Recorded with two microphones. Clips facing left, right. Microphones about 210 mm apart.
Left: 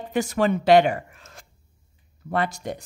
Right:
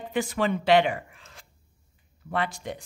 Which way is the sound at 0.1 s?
45° left (ahead or behind).